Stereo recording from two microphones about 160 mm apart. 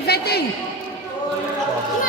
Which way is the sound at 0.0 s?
80° left.